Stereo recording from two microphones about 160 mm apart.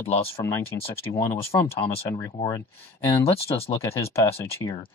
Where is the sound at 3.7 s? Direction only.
15° left (ahead or behind).